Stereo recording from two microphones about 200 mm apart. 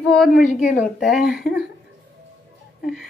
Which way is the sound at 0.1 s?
Centre (ahead or behind).